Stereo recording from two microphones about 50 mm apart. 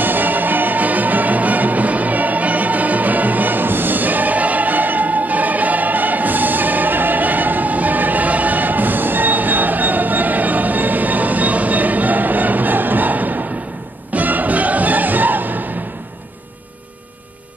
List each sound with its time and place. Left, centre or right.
0.0 s music: right